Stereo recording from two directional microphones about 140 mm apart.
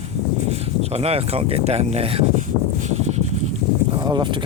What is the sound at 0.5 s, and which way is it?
Speech, 45° right (ahead or behind).